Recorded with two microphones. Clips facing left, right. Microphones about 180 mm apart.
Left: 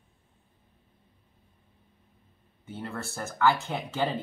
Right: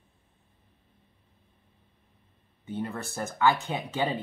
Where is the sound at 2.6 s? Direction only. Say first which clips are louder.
Right 3 dB; 15° right (ahead or behind).